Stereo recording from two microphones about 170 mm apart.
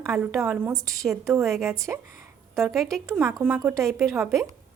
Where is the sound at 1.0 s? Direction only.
Centre (ahead or behind).